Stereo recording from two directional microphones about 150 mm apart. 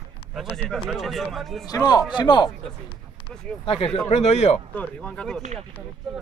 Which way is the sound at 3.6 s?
40° left (ahead or behind).